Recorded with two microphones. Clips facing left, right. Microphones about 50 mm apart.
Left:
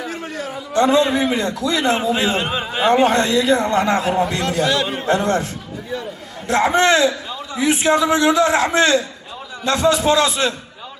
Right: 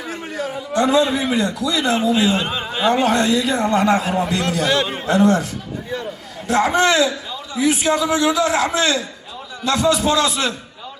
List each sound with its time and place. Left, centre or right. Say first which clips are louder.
0.0 s a sound: right 1 dB; centre
0.8 s a man's voice: left 2 dB; left
3.1 s a man's voice: left 2 dB; left
4.6 s a man's voice: even; right
5.0 s a man's voice: right 3 dB; left
6.5 s a man's voice: left 1 dB; left